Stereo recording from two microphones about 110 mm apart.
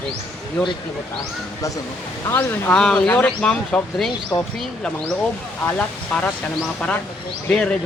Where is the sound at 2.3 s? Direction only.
20° left (ahead or behind).